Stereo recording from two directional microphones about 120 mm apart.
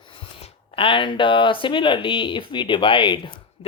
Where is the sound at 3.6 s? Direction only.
50° left (ahead or behind).